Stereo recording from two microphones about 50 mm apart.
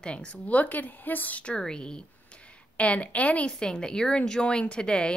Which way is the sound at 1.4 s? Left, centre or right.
Centre.